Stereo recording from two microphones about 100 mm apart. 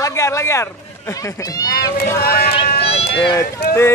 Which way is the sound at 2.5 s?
80° left.